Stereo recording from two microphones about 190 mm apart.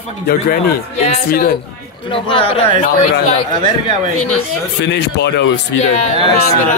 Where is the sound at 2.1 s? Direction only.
25° left (ahead or behind).